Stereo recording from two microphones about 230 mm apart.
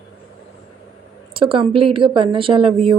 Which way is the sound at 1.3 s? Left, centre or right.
Right.